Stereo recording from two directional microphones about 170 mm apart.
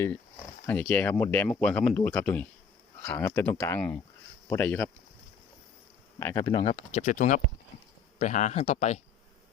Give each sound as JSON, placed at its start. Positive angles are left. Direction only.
{"t": 0.7, "sound": "speech", "side_deg": 10}
{"t": 6.1, "sound": "speech", "side_deg": 15}
{"t": 6.6, "sound": "speech", "side_deg": 35}
{"t": 7.0, "sound": "speech", "side_deg": 50}